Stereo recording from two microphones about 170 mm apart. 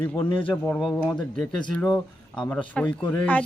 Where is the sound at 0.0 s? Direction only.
10° left (ahead or behind).